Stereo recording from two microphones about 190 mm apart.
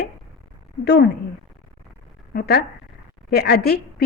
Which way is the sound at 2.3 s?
55° left (ahead or behind).